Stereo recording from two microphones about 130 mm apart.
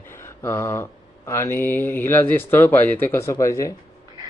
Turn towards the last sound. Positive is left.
turn(degrees=25)  # may be behind; listen again after turning